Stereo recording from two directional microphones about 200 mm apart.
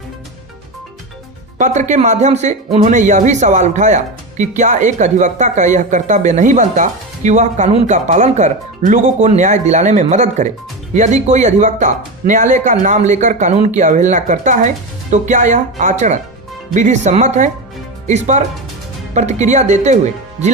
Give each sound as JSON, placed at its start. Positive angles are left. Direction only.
{"t": 1.5, "sound": "speech", "side_deg": -35}